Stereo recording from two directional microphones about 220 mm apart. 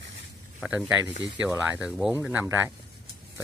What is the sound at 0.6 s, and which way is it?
Speech, 5° right (ahead or behind).